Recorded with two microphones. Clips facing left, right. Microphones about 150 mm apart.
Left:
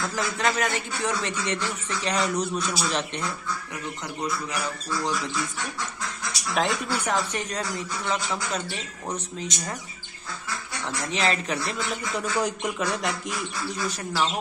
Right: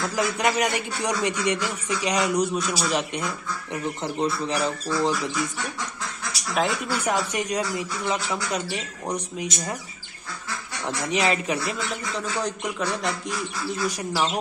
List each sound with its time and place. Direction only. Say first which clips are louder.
0.1 s speech: right 4 dB; 15° right (ahead or behind)
4.0 s speech: right 4 dB; 30° right (ahead or behind)
6.5 s speech: right 1 dB; 5° right (ahead or behind)
11.1 s speech: right 3 dB; 15° right (ahead or behind)
12.4 s speech: even; 5° left (ahead or behind)